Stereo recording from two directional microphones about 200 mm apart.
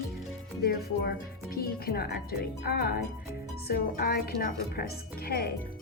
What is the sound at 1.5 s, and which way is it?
Speech, 50° left (ahead or behind).